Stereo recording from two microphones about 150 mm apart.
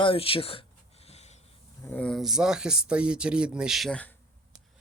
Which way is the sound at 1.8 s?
10° left (ahead or behind).